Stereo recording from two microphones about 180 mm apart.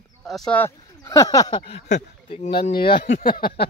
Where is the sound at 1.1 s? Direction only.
20° left (ahead or behind).